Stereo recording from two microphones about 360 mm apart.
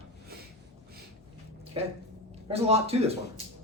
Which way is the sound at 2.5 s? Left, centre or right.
Centre.